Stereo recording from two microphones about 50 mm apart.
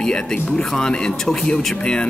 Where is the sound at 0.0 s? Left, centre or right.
Centre.